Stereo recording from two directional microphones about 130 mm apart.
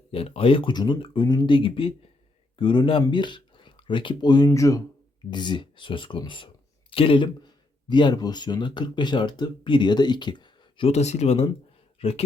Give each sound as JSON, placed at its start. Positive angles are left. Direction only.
{"t": 0.1, "sound": "speech", "side_deg": 45}
{"t": 5.3, "sound": "speech", "side_deg": 35}
{"t": 10.8, "sound": "speech", "side_deg": 60}